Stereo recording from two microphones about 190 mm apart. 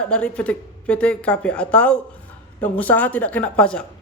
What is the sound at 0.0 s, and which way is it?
Speech, 5° left (ahead or behind).